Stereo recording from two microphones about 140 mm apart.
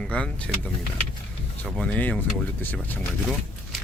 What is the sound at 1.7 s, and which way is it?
Speech, 10° left (ahead or behind).